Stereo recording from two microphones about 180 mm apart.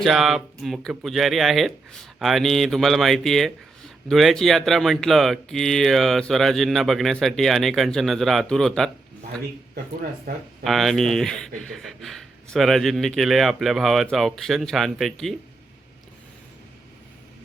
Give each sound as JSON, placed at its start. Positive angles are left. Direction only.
{"t": 0.0, "sound": "speech", "side_deg": 0}
{"t": 10.3, "sound": "speech", "side_deg": -50}
{"t": 10.6, "sound": "speech", "side_deg": 0}